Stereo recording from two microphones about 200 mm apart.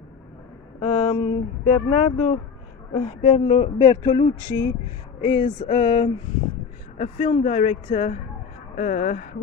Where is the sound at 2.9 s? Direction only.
30° left (ahead or behind).